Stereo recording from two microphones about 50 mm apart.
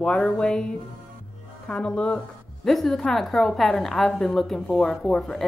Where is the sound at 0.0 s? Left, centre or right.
Centre.